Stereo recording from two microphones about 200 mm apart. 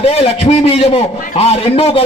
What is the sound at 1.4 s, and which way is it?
Speech, 30° left (ahead or behind).